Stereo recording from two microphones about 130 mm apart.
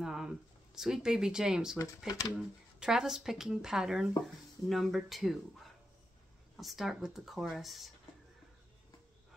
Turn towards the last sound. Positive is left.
turn(degrees=0)  # may be behind; listen again after turning